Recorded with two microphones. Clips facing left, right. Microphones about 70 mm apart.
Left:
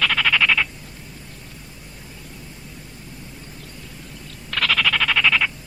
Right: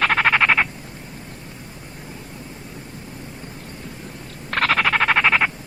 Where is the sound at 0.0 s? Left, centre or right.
Right.